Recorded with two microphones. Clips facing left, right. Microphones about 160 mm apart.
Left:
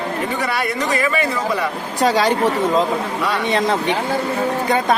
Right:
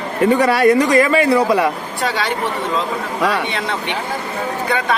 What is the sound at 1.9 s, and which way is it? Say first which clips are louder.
Speech: left 5 dB; 40° left (ahead or behind).